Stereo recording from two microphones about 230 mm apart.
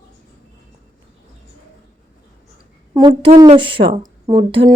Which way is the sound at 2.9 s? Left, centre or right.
Centre.